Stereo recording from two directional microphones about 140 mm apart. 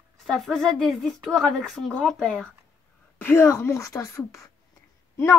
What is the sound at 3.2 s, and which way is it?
A woman's voice, 15° left (ahead or behind).